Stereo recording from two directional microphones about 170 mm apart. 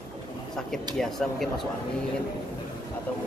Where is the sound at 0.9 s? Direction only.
Centre (ahead or behind).